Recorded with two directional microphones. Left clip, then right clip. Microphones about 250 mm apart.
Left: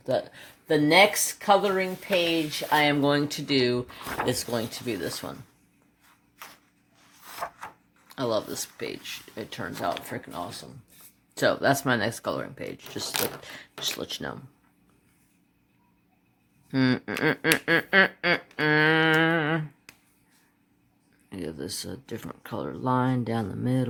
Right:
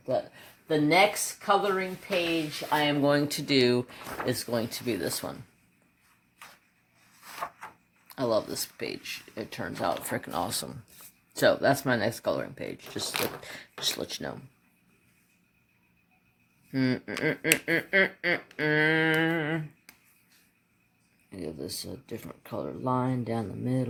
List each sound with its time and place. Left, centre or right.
0.0 s speech: centre
2.3 s speech: centre
3.0 s speech: centre
4.3 s speech: centre
8.0 s speech: centre
10.1 s speech: centre
11.3 s speech: centre
16.7 s speech: centre
21.2 s speech: centre